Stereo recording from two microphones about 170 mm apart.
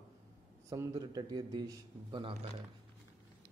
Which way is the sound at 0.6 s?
20° right (ahead or behind).